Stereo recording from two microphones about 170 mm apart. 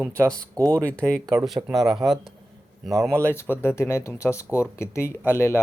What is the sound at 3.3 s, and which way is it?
Speech, 15° left (ahead or behind).